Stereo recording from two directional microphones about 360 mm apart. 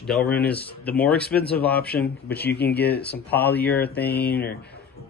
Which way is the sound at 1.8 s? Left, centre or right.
Left.